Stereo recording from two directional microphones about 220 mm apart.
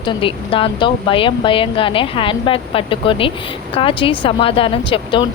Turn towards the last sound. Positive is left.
turn(degrees=25)  # may be behind; listen again after turning